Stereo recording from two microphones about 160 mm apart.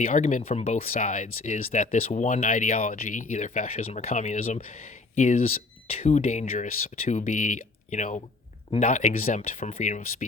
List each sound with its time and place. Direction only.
0.0 s speech: 50° left (ahead or behind)